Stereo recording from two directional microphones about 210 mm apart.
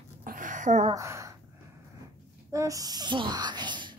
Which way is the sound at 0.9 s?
15° right (ahead or behind).